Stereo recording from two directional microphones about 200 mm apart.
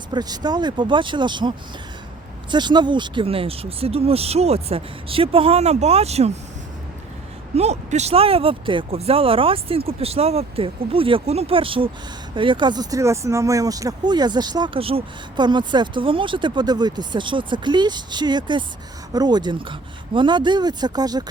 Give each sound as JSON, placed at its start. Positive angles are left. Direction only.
{"t": 0.1, "sound": "speech", "side_deg": -20}
{"t": 7.5, "sound": "speech", "side_deg": -35}